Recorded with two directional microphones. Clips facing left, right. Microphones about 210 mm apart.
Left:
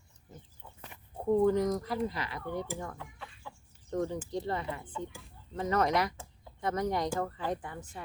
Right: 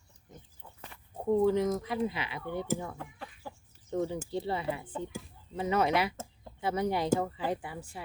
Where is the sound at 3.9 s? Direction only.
5° right (ahead or behind).